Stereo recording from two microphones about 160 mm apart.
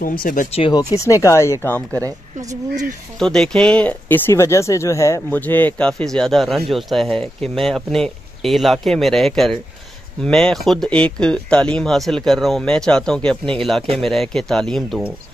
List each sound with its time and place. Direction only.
0.0 s speech: 60° left (ahead or behind)
0.5 s speech: 35° left (ahead or behind)
0.9 s speech: 20° left (ahead or behind)
2.5 s speech: 50° right (ahead or behind)
3.2 s speech: 5° left (ahead or behind)